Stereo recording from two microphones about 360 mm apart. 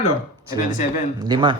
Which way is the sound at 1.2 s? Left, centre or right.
Centre.